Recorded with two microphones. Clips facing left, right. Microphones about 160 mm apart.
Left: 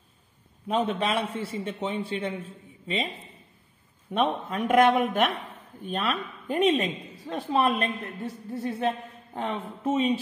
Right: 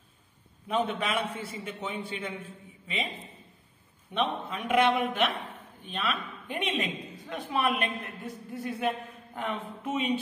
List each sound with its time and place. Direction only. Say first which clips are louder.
0.7 s a woman's voice: left 3 dB; 35° left (ahead or behind)
4.1 s a man's voice: left 4 dB; 45° left (ahead or behind)